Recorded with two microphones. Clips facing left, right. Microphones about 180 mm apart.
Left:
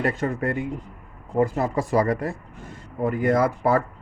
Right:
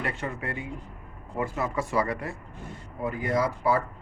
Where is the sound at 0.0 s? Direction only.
45° left (ahead or behind).